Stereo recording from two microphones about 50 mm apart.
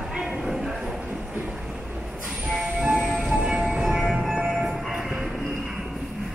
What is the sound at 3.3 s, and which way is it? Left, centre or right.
Train, centre.